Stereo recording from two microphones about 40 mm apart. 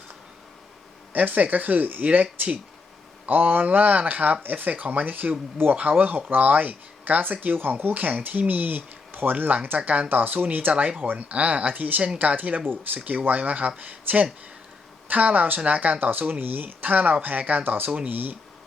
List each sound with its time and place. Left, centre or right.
1.1 s speech: right
3.2 s speech: right
10.7 s speech: right
12.6 s speech: right
13.1 s speech: right
17.6 s speech: right
17.8 s speech: right